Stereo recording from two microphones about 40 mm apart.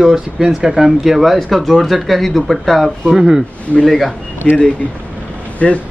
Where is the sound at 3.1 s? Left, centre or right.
Centre.